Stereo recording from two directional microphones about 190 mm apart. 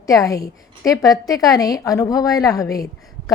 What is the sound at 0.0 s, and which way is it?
A woman's voice, 20° left (ahead or behind).